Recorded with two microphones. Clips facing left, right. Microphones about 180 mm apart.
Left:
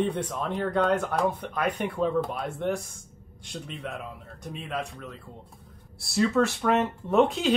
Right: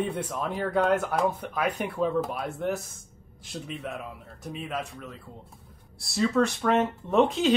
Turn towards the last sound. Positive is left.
turn(degrees=0)  # may be behind; listen again after turning